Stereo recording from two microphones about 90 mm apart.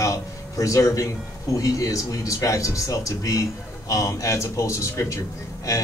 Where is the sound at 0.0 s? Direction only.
35° left (ahead or behind).